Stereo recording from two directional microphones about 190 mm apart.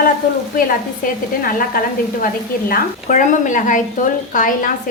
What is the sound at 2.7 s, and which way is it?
A woman's voice, 40° left (ahead or behind).